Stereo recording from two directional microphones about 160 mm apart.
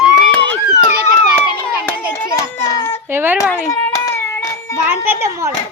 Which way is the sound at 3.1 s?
15° right (ahead or behind).